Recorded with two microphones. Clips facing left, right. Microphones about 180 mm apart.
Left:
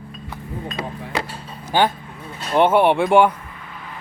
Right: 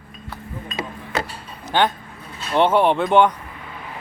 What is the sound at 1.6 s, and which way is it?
Speech, 10° left (ahead or behind).